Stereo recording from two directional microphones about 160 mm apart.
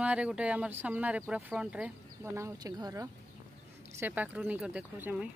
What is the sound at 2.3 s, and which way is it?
Speech, 20° right (ahead or behind).